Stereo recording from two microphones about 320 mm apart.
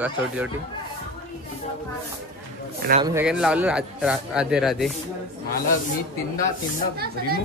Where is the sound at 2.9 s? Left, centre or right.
Centre.